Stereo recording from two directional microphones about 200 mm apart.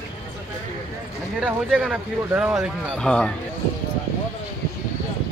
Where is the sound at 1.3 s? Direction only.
Centre (ahead or behind).